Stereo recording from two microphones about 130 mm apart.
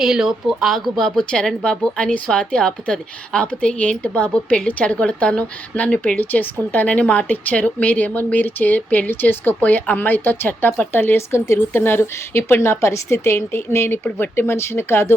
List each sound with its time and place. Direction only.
0.0 s a woman's voice: 5° right (ahead or behind); by 15.1 s 20° left (ahead or behind)